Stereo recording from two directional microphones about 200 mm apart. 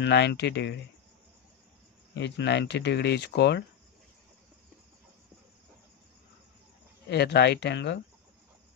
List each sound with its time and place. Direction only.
0.0 s speech: 55° left (ahead or behind)
2.1 s speech: 60° left (ahead or behind)
7.1 s speech: 55° left (ahead or behind)